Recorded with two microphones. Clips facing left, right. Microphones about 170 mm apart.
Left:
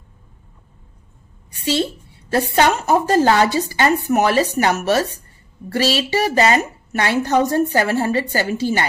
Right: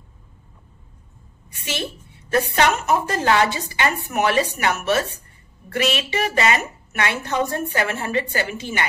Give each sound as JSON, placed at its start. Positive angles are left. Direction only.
{"t": 2.3, "sound": "a woman's voice", "side_deg": 30}